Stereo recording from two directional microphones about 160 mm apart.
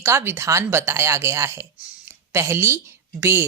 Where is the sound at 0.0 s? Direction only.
15° right (ahead or behind).